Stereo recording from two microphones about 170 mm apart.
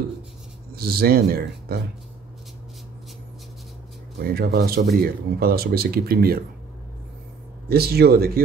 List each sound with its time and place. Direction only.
0.7 s speech: 65° right (ahead or behind)
4.2 s speech: 65° right (ahead or behind)
7.6 s speech: 65° right (ahead or behind)